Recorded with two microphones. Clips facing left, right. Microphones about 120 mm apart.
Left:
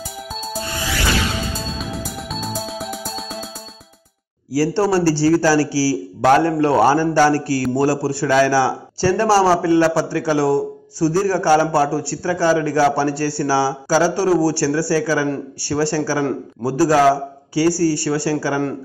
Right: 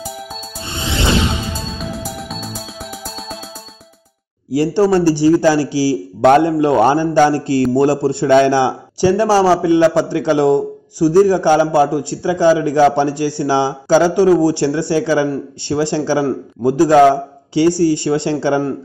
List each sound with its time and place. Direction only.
0.7 s music: 25° right (ahead or behind)
1.8 s music: centre (ahead or behind)
4.5 s a man's voice: 20° right (ahead or behind)